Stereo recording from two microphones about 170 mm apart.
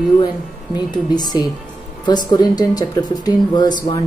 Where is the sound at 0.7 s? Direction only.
25° left (ahead or behind).